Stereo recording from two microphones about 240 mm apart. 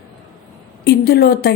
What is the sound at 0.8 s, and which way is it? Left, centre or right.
Speech, left.